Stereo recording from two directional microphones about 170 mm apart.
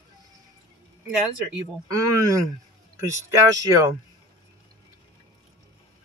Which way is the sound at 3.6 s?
20° right (ahead or behind).